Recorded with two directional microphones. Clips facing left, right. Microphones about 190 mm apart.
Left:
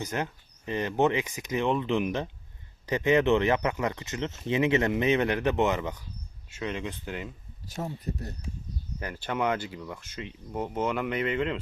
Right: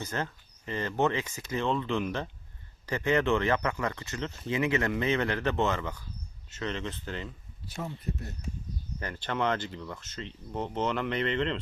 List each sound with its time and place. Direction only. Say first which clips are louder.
0.0 s speech: left 2 dB; 15° left (ahead or behind)
7.8 s speech: left 2 dB; 40° left (ahead or behind)
9.0 s speech: left 1 dB; 10° left (ahead or behind)